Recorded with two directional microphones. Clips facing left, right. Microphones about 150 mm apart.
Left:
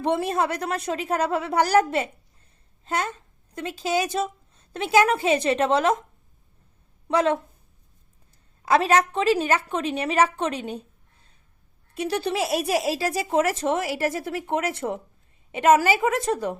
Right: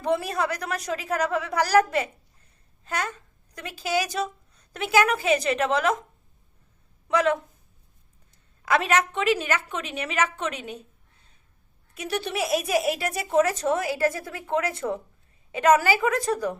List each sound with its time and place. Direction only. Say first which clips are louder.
0.0 s a woman's voice: left 2 dB; 25° left (ahead or behind)
7.1 s speech: left 1 dB; 30° left (ahead or behind)
8.6 s speech: left 3 dB; 35° left (ahead or behind)
11.9 s speech: left 3 dB; 30° left (ahead or behind)